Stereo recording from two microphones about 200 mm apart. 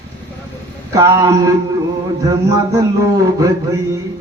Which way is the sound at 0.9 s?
15° right (ahead or behind).